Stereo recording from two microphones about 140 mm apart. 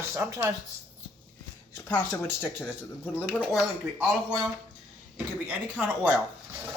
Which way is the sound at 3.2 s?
5° right (ahead or behind).